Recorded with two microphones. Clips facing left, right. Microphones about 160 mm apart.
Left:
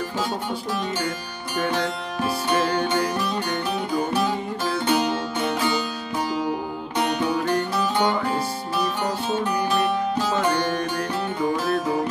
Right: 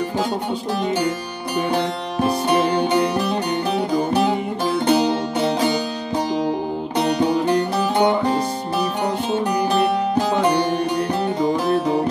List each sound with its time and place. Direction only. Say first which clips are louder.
2.5 s music: right 3 dB; 15° right (ahead or behind)
4.3 s music: right 5 dB; 20° right (ahead or behind)
4.8 s music: right 5 dB; 35° right (ahead or behind)
7.9 s music: right 6 dB; 15° right (ahead or behind)
10.1 s music: right 4 dB; 15° right (ahead or behind)